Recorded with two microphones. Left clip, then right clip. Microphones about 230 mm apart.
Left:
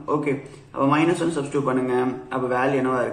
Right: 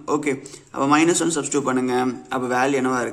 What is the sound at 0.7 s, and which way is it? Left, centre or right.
A man's voice, right.